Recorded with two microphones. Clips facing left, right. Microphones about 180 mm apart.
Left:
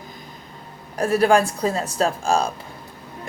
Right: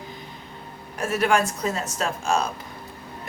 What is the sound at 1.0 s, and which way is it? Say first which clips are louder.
A woman's voice: left 5 dB; 35° left (ahead or behind).